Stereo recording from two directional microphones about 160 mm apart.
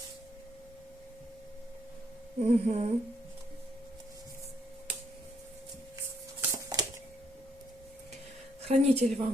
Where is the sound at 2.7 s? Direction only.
45° right (ahead or behind).